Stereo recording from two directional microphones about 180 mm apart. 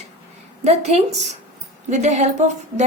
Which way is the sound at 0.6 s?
35° right (ahead or behind).